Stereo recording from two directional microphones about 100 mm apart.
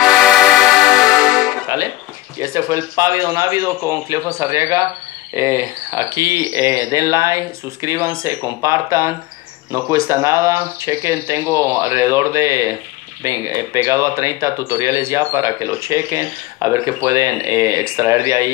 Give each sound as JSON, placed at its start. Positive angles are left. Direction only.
{"t": 0.0, "sound": "music", "side_deg": 0}
{"t": 2.3, "sound": "speech", "side_deg": -30}